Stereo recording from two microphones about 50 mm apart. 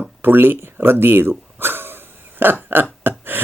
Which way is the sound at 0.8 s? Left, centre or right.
Right.